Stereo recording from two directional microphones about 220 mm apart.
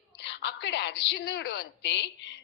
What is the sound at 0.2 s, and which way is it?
A woman's voice, 55° left (ahead or behind).